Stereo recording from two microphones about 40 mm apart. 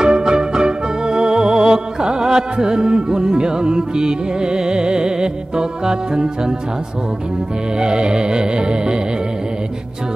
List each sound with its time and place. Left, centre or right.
0.0 s music: centre
7.8 s music: right